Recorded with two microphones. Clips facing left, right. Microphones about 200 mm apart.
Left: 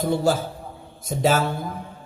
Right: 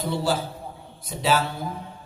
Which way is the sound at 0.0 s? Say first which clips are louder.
Left 4 dB; 50° left (ahead or behind).